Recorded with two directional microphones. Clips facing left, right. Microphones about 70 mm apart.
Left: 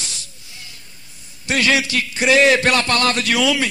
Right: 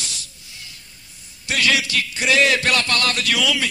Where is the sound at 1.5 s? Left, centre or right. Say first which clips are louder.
Left 3 dB; left.